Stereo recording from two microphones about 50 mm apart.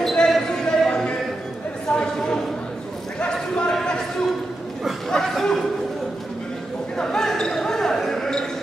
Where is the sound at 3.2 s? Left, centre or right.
Centre.